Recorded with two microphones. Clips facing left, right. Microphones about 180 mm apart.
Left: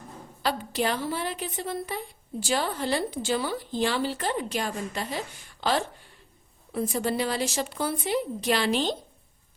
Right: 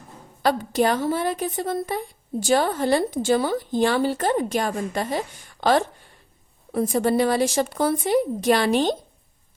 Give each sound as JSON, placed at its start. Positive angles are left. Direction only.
{"t": 0.4, "sound": "a woman's voice", "side_deg": -50}